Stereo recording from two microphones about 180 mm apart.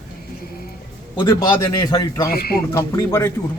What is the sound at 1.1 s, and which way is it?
Speech, 25° left (ahead or behind).